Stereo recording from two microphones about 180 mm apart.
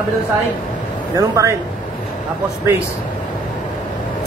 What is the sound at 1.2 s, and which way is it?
Speech, 15° right (ahead or behind).